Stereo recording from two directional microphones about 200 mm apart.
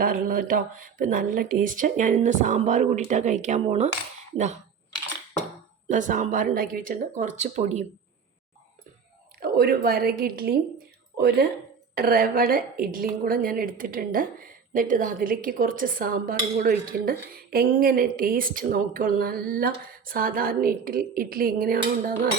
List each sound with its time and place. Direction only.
0.0 s speech: 45° right (ahead or behind)
5.9 s speech: 40° right (ahead or behind)
9.4 s a woman's voice: 50° right (ahead or behind)